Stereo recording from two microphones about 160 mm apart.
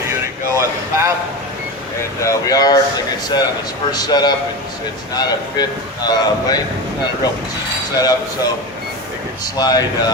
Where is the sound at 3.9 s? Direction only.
25° left (ahead or behind).